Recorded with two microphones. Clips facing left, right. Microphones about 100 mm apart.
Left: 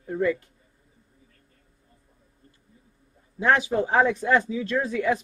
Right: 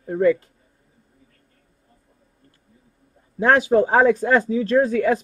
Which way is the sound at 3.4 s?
40° right (ahead or behind).